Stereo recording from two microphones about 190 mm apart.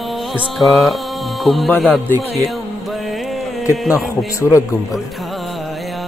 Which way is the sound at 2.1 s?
15° right (ahead or behind).